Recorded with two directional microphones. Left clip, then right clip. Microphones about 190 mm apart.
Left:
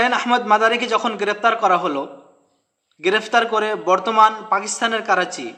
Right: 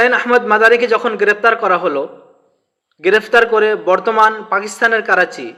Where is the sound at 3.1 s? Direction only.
5° left (ahead or behind).